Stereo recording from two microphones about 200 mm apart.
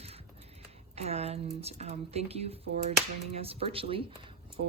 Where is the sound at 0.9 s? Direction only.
30° right (ahead or behind).